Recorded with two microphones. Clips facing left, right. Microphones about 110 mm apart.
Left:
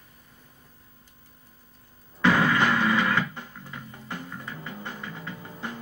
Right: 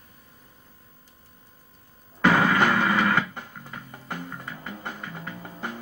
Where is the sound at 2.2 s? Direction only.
20° right (ahead or behind).